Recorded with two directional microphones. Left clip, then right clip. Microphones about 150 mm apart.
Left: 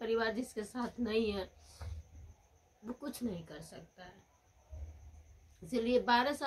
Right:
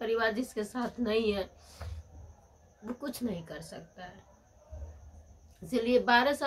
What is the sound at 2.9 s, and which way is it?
A woman's voice, 15° left (ahead or behind).